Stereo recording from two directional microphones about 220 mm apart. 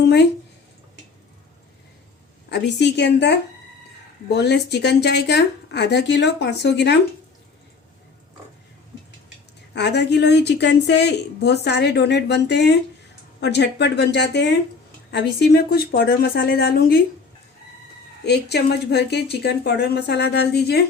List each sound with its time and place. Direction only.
2.5 s a woman's voice: 50° left (ahead or behind)
9.7 s a woman's voice: 50° left (ahead or behind)
18.3 s a woman's voice: 50° left (ahead or behind)